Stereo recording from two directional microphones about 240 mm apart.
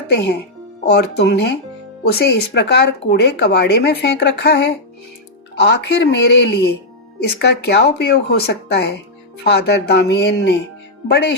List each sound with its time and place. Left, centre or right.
0.1 s speech: left